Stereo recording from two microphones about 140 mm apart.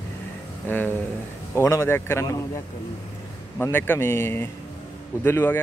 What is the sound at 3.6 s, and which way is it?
Speech, 15° left (ahead or behind).